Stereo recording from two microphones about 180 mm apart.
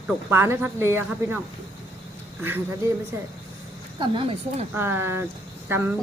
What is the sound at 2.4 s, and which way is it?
Speech, 10° right (ahead or behind).